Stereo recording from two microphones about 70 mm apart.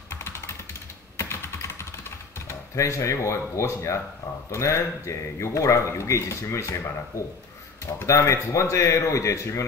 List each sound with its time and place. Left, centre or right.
0.1 s computer keyboard: left
1.1 s typing: left
4.5 s speech: left
8.1 s speech: left